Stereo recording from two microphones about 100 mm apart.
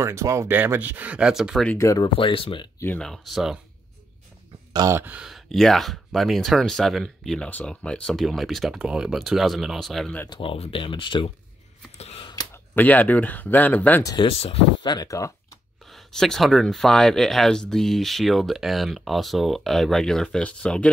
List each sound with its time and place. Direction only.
0.0 s speech: 30° right (ahead or behind); by 1.6 s 5° right (ahead or behind)
1.8 s speech: 30° left (ahead or behind)
2.1 s speech: 60° left (ahead or behind)
3.0 s speech: centre (ahead or behind)
4.9 s speech: 20° right (ahead or behind)
5.2 s speech: centre (ahead or behind)
10.3 s speech: 65° left (ahead or behind)
12.0 s a sound: 90° left
12.7 s speech: 15° left (ahead or behind)
14.1 s speech: 70° left (ahead or behind)
14.8 s speech: 45° left (ahead or behind)
15.0 s speech: 35° left (ahead or behind)
15.9 s speech: 5° left (ahead or behind)